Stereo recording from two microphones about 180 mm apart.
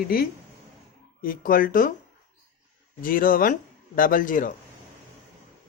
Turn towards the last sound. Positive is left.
turn(degrees=50)  # may be behind; listen again after turning